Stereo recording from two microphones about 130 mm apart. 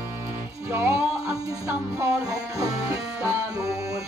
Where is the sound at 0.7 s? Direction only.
20° right (ahead or behind).